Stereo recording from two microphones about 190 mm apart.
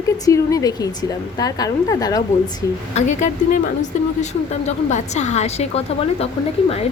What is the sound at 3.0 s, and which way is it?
Speech, 40° left (ahead or behind).